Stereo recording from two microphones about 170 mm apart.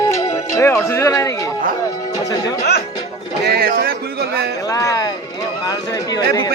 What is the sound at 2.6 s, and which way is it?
Music, 65° left (ahead or behind).